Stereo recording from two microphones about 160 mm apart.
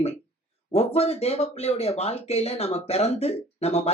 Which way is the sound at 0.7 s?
40° left (ahead or behind).